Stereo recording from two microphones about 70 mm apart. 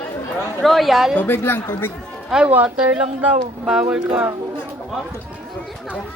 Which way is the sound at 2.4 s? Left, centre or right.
Right.